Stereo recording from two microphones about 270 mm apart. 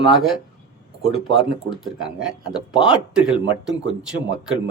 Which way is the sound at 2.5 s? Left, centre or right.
Centre.